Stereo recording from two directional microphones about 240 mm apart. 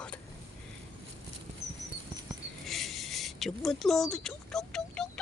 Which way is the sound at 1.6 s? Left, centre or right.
Right.